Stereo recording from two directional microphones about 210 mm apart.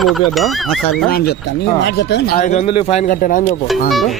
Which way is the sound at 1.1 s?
50° left (ahead or behind).